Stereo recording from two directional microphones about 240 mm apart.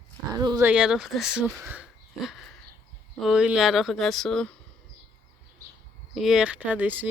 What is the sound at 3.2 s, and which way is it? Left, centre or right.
Speech, centre.